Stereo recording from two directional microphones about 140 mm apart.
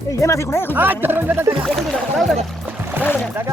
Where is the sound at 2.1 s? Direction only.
Centre (ahead or behind).